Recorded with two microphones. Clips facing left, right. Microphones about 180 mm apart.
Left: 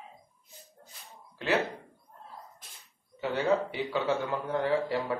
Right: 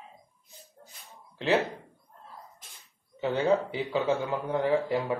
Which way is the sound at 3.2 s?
15° right (ahead or behind).